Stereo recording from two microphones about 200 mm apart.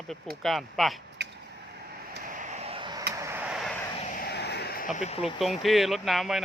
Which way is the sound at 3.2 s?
10° right (ahead or behind).